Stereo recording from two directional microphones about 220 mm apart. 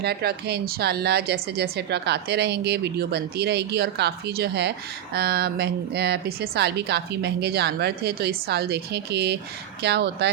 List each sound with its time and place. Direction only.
0.0 s speech: 45° right (ahead or behind)